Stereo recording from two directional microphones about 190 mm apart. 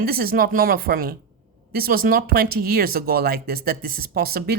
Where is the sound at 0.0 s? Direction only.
50° right (ahead or behind).